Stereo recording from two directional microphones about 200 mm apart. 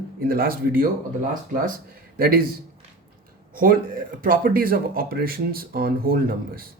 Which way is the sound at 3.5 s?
45° right (ahead or behind).